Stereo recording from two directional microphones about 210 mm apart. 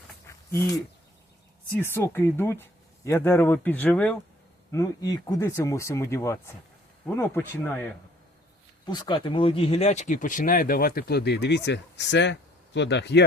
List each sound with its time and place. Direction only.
0.3 s a sound: 15° left (ahead or behind)
1.7 s speech: 10° left (ahead or behind)
8.9 s speech: 20° left (ahead or behind); by 13.2 s 55° left (ahead or behind)